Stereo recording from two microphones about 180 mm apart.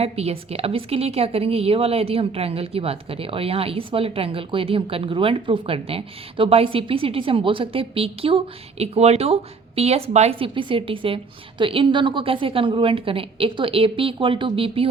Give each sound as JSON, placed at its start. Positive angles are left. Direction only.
{"t": 0.0, "sound": "a woman's voice", "side_deg": -35}